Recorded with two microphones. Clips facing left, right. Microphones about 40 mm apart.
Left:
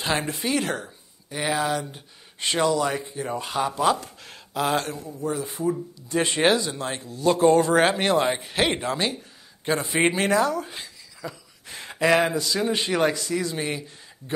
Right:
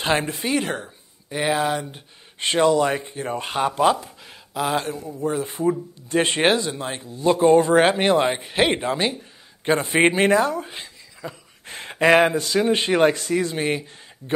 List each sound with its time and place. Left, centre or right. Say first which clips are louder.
0.2 s speech: right 2 dB; centre
2.4 s speech: right 4 dB; right
4.2 s speech: even; centre
4.9 s speech: right 4 dB; right
6.7 s speech: right 1 dB; centre
9.7 s speech: right 4 dB; right
11.6 s a sound: right 4 dB; right
12.4 s speech: right 4 dB; right